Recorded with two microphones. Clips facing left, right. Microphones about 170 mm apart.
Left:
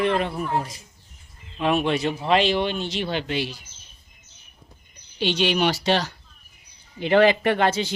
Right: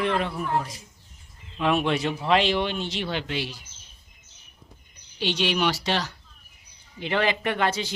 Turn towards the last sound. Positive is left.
turn(degrees=25)  # may be behind; listen again after turning